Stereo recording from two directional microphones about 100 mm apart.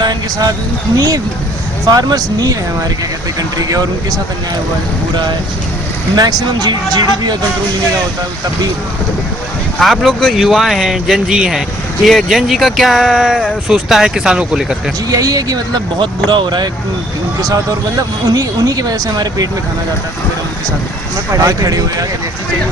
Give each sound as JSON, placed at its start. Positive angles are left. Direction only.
{"t": 0.0, "sound": "speech", "side_deg": -40}
{"t": 6.1, "sound": "speech", "side_deg": -40}
{"t": 9.7, "sound": "speech", "side_deg": 0}
{"t": 15.1, "sound": "speech", "side_deg": -35}
{"t": 18.3, "sound": "speech", "side_deg": -40}
{"t": 21.4, "sound": "speech", "side_deg": -35}